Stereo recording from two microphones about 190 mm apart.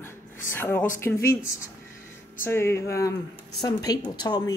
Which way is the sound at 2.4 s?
10° left (ahead or behind).